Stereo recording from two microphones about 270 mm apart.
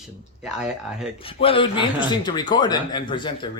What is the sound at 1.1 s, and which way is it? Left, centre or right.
Speech, centre.